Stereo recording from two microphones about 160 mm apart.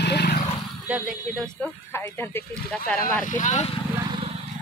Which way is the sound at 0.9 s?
5° right (ahead or behind).